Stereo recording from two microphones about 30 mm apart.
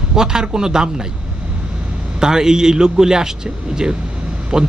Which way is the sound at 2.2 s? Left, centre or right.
Right.